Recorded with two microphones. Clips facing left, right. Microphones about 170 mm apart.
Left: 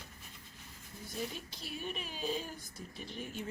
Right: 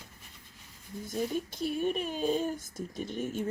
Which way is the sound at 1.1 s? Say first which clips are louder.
Right 9 dB; 45° right (ahead or behind).